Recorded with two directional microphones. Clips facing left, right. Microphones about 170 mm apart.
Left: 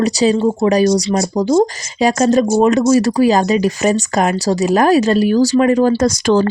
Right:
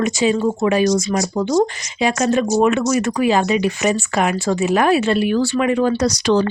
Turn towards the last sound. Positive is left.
turn(degrees=45)  # may be behind; listen again after turning